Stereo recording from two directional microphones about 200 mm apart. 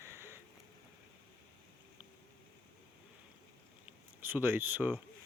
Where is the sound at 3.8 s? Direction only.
10° right (ahead or behind).